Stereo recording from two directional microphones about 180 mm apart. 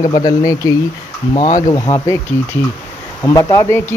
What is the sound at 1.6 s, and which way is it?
Speech, 20° left (ahead or behind).